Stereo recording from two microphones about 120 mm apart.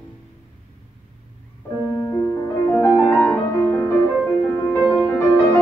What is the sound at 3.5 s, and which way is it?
Music, 25° left (ahead or behind).